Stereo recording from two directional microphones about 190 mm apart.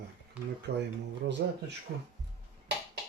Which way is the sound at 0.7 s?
55° right (ahead or behind).